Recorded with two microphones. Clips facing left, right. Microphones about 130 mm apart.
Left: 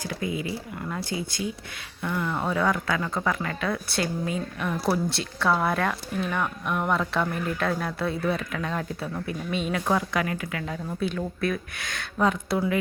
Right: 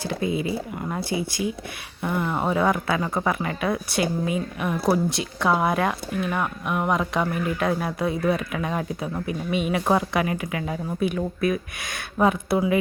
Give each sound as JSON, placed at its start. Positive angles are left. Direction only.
{"t": 0.1, "sound": "speech", "side_deg": -25}
{"t": 9.8, "sound": "speech", "side_deg": -25}